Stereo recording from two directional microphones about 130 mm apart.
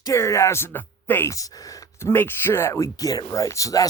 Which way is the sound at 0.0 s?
25° left (ahead or behind).